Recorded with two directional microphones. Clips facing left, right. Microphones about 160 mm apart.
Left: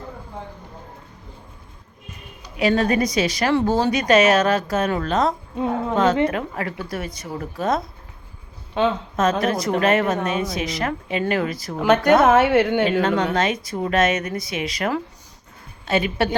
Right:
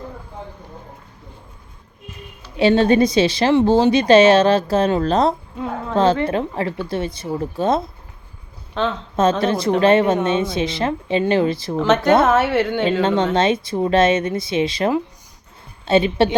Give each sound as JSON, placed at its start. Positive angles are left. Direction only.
{"t": 2.6, "sound": "a woman's voice", "side_deg": -30}
{"t": 5.5, "sound": "a sound", "side_deg": 20}
{"t": 6.2, "sound": "a woman's voice", "side_deg": -30}
{"t": 9.4, "sound": "a woman's voice", "side_deg": -30}
{"t": 11.8, "sound": "speech", "side_deg": 10}
{"t": 13.0, "sound": "a woman's voice", "side_deg": -25}